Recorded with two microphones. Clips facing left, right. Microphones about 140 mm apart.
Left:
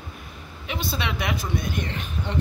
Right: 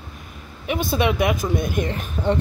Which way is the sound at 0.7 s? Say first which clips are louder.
Right 8 dB; 50° right (ahead or behind).